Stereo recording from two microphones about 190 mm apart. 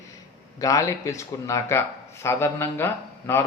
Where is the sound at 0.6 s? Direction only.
15° left (ahead or behind).